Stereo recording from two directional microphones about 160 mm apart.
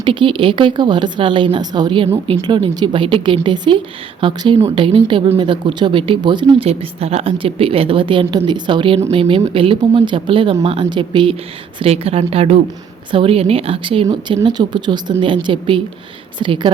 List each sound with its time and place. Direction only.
0.0 s speech: 30° right (ahead or behind)